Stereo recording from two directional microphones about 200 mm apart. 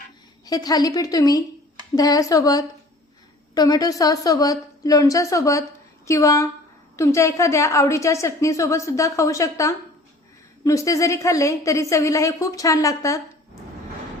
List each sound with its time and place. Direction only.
0.4 s a woman's voice: 20° left (ahead or behind)